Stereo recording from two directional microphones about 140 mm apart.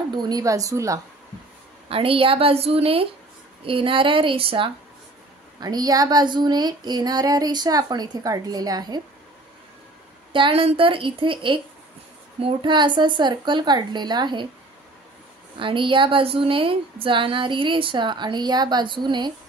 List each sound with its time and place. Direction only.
0.1 s female singing: 30° right (ahead or behind)
1.9 s a woman's voice: 40° right (ahead or behind)
5.6 s female singing: 30° right (ahead or behind)
10.3 s a woman's voice: 40° right (ahead or behind)
15.6 s a woman's voice: 35° right (ahead or behind)